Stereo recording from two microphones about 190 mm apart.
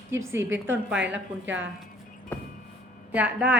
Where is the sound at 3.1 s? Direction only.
10° right (ahead or behind).